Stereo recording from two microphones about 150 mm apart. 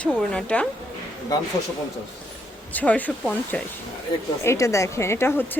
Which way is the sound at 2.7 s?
10° left (ahead or behind).